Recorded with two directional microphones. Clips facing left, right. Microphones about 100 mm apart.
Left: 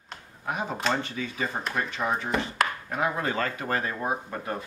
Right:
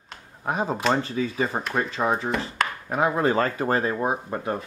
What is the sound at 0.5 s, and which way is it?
Speech, 30° right (ahead or behind).